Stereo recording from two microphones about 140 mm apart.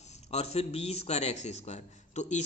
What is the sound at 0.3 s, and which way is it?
A man's voice, 50° left (ahead or behind).